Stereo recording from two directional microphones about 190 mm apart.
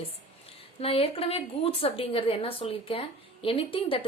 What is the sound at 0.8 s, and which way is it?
A woman's voice, 30° left (ahead or behind).